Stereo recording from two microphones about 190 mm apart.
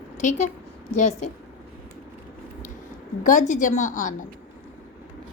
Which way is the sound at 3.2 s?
45° left (ahead or behind).